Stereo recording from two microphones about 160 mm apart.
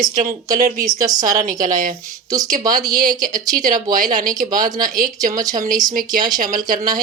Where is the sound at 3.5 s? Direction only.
55° right (ahead or behind).